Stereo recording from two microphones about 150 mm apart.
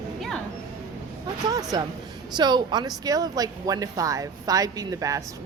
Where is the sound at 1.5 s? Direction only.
25° right (ahead or behind).